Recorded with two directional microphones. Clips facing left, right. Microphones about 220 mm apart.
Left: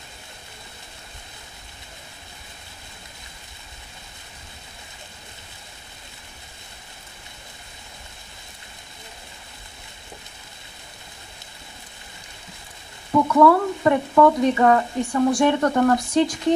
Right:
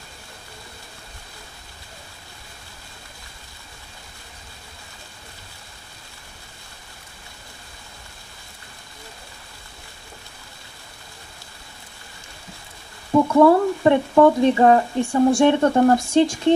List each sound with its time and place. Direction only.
13.1 s speech: 30° right (ahead or behind)